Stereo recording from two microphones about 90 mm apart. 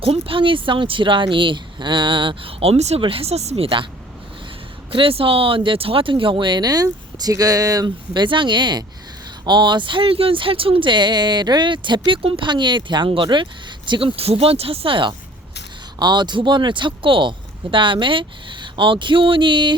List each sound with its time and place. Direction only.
0.0 s speech: 85° right
4.9 s speech: 90° right; by 15.1 s 70° right (ahead or behind)
16.0 s speech: 55° right (ahead or behind)